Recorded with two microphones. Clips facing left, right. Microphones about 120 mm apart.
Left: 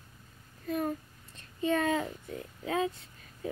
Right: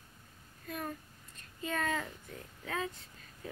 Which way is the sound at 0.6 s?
35° left (ahead or behind).